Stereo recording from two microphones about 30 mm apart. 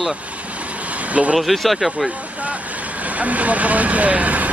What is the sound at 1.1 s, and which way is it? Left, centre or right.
Speech, right.